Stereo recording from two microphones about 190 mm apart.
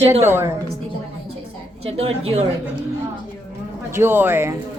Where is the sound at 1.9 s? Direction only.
30° right (ahead or behind).